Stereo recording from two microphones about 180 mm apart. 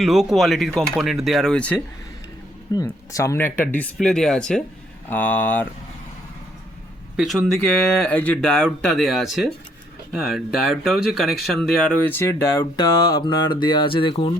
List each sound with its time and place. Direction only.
0.0 s speech: centre (ahead or behind)
2.7 s speech: 20° left (ahead or behind)
7.2 s speech: centre (ahead or behind); by 14.3 s 30° left (ahead or behind)